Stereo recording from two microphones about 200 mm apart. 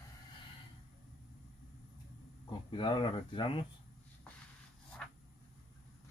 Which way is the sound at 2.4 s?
25° left (ahead or behind).